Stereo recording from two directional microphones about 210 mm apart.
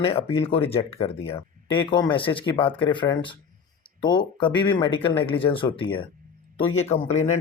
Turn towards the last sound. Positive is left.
turn(degrees=30)  # may be behind; listen again after turning